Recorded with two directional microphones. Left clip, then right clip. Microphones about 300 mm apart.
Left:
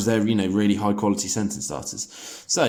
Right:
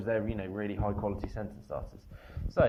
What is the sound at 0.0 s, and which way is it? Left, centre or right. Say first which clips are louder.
Speech: left 10 dB; centre.